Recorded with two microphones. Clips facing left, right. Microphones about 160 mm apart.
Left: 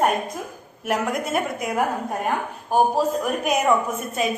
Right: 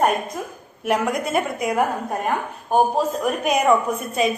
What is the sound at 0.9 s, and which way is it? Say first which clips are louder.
A woman's voice: right 2 dB; centre (ahead or behind).